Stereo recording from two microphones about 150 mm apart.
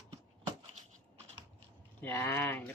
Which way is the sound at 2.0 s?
15° left (ahead or behind).